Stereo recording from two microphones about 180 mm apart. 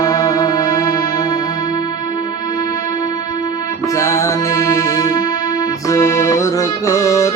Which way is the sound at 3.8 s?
20° left (ahead or behind).